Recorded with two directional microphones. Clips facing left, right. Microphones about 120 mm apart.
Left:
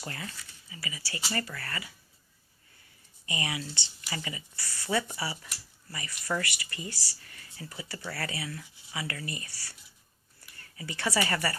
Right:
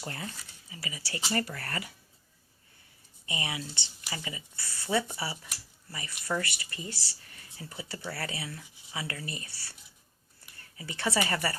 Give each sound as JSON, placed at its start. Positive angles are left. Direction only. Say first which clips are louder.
{"t": 0.0, "sound": "speech", "louder": "right 1 dB", "side_deg": -25}
{"t": 3.2, "sound": "speech", "louder": "left 1 dB", "side_deg": -20}